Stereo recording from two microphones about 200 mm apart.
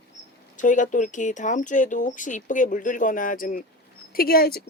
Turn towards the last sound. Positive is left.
turn(degrees=50)  # may be behind; listen again after turning